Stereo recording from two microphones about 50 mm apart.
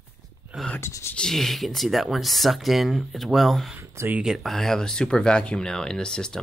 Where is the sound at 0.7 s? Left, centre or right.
Left.